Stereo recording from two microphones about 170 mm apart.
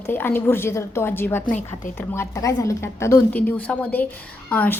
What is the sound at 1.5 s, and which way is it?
Speech, 50° left (ahead or behind).